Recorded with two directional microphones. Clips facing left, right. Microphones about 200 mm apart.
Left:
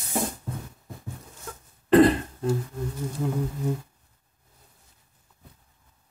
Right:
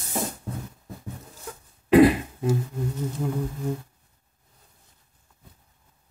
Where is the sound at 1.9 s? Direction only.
10° right (ahead or behind).